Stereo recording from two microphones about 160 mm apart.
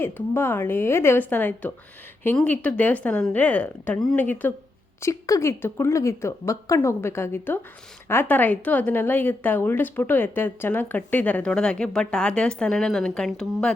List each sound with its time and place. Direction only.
0.0 s a woman's voice: 15° left (ahead or behind)